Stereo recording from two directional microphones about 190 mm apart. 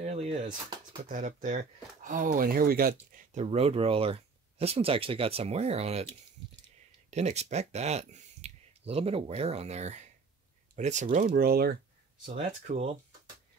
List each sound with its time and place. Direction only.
0.0 s a sound: 35° right (ahead or behind)
1.0 s speech: 40° right (ahead or behind)
3.3 s speech: 35° right (ahead or behind)
7.1 s speech: 35° right (ahead or behind); by 11.8 s 55° right (ahead or behind)
12.3 s speech: 35° right (ahead or behind)